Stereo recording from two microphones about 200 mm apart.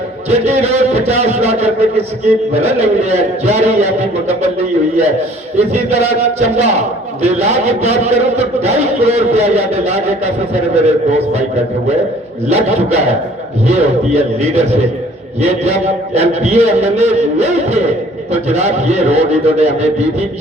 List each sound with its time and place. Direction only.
0.3 s a man's voice: 35° right (ahead or behind)
5.5 s a man's voice: 35° right (ahead or behind)
12.5 s a man's voice: 35° right (ahead or behind)